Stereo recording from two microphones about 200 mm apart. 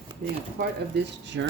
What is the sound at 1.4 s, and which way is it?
Speech, 65° right (ahead or behind).